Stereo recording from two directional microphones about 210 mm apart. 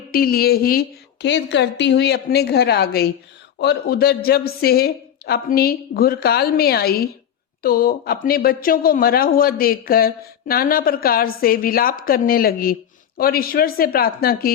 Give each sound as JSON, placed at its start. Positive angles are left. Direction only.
{"t": 0.1, "sound": "speech", "side_deg": 45}